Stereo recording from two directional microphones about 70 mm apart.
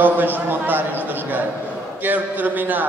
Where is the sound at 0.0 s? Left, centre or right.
Right.